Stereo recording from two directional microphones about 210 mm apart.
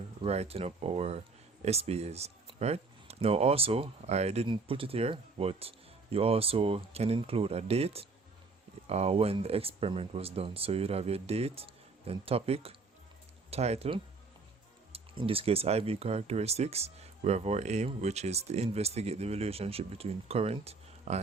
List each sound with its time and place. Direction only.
0.2 s speech: 30° right (ahead or behind)